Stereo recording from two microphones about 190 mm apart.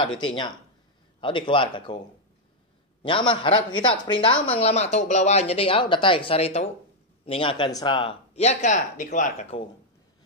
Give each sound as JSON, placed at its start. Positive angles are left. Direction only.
{"t": 0.2, "sound": "a man's voice", "side_deg": 25}
{"t": 3.0, "sound": "a man's voice", "side_deg": 25}